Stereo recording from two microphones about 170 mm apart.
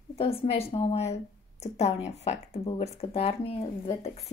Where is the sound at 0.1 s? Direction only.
35° left (ahead or behind).